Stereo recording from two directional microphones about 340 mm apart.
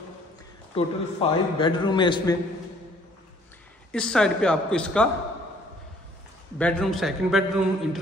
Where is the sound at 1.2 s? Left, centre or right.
Centre.